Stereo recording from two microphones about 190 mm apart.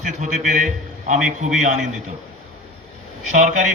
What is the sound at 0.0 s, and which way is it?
A man's voice, 40° right (ahead or behind).